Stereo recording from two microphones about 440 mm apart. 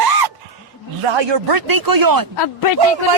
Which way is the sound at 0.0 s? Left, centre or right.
Right.